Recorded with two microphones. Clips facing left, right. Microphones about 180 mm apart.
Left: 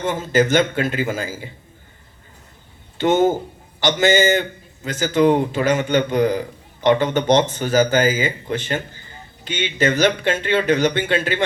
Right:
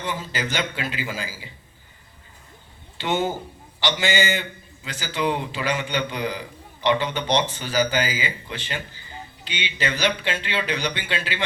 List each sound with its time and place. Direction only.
0.0 s a man's voice: 50° left (ahead or behind)
3.0 s a man's voice: 45° left (ahead or behind)